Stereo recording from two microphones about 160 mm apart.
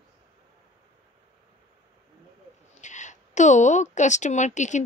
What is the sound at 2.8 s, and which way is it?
A woman's voice, 50° left (ahead or behind).